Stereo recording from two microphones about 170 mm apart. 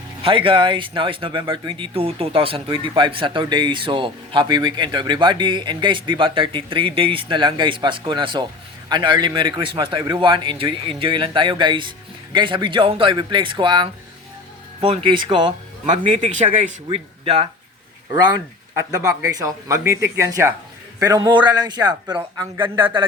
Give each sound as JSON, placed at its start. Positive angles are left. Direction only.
{"t": 0.2, "sound": "speech", "side_deg": -30}
{"t": 16.5, "sound": "speech", "side_deg": -50}
{"t": 16.9, "sound": "speech", "side_deg": -35}
{"t": 18.8, "sound": "speech", "side_deg": -20}